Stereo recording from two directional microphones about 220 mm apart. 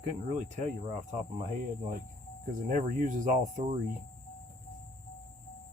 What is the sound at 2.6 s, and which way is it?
Speech, 35° right (ahead or behind).